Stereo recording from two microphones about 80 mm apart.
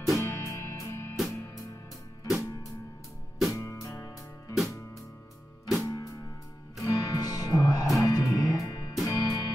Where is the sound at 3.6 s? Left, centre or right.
Left.